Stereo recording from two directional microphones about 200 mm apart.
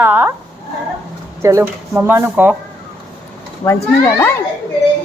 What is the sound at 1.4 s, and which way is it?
A woman's voice, 10° right (ahead or behind).